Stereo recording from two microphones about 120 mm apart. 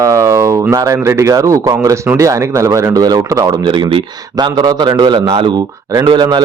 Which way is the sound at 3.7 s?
40° right (ahead or behind).